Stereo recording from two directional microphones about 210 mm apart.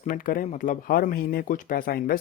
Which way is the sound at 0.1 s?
40° left (ahead or behind).